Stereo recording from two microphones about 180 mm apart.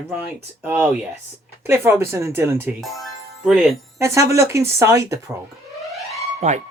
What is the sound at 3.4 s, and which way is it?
Speech, centre (ahead or behind).